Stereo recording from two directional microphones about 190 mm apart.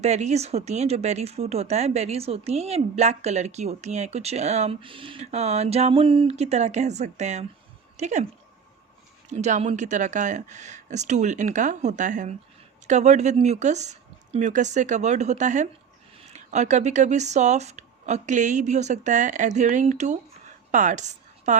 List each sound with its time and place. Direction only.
0.0 s speech: 35° right (ahead or behind)
9.3 s a woman's voice: 35° right (ahead or behind)